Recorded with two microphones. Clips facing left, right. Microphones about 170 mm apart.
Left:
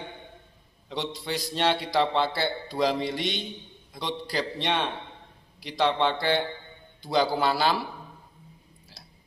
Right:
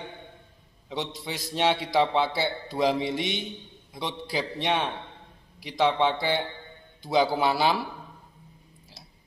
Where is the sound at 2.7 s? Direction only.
20° right (ahead or behind).